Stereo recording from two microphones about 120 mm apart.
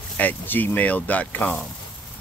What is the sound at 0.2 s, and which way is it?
Speech, 15° left (ahead or behind).